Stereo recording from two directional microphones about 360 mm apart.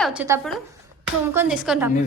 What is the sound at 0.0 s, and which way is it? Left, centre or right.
A woman's voice, centre.